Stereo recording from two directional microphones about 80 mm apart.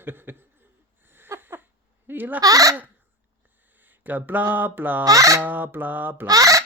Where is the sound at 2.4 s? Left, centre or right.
Right.